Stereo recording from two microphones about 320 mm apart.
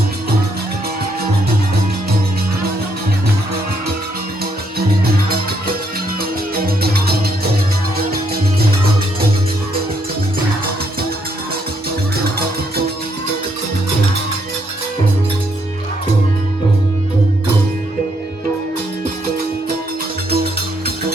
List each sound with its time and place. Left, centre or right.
6.7 s music: right
20.3 s music: right